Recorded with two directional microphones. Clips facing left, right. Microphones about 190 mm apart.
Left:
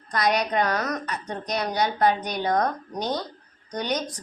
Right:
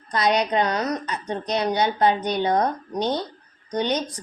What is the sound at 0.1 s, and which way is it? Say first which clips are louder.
A woman's voice: right 2 dB; 25° right (ahead or behind).